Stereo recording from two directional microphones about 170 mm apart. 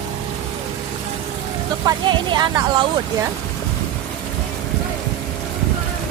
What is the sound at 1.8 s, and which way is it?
Speech, 25° right (ahead or behind).